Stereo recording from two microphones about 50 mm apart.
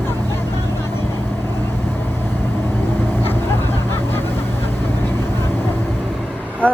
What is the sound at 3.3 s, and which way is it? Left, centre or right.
Vehicle, left.